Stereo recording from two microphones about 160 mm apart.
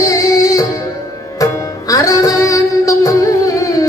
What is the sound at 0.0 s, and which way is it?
Music, 20° left (ahead or behind).